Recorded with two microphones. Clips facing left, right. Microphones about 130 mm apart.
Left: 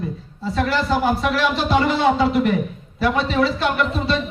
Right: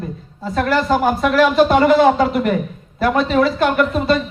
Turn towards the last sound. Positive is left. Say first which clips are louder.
# right 5 dB
turn(degrees=-50)  # may be behind; listen again after turning